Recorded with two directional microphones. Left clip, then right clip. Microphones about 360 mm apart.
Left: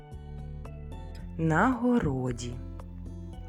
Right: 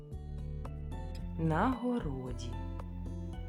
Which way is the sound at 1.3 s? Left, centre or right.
Centre.